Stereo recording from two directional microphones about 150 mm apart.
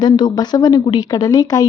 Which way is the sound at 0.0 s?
30° left (ahead or behind).